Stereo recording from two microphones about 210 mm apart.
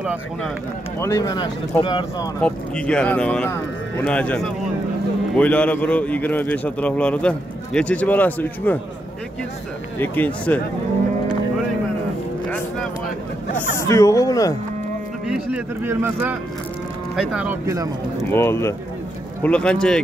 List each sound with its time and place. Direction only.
0.0 s speech: 5° right (ahead or behind)
0.9 s speech: 15° left (ahead or behind)
2.4 s a man's voice: 5° left (ahead or behind)
9.9 s a man's voice: 10° left (ahead or behind)
13.7 s a man's voice: 15° left (ahead or behind)
15.2 s speech: 5° right (ahead or behind)
18.3 s a man's voice: 10° left (ahead or behind)